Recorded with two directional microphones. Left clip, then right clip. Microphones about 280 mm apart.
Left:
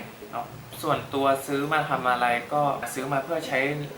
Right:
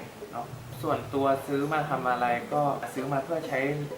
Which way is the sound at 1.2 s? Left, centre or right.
Centre.